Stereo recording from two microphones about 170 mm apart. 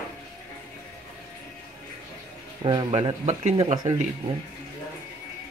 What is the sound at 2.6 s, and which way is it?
Speech, 30° right (ahead or behind).